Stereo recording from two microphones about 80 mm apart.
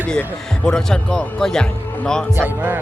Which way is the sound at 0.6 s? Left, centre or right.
Centre.